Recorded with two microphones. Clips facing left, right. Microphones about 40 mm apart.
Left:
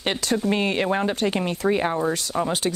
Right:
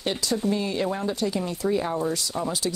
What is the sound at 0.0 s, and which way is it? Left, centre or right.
Speech, left.